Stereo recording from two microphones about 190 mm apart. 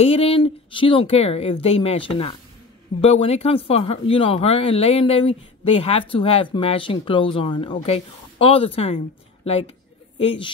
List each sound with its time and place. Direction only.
0.0 s speech: 30° left (ahead or behind)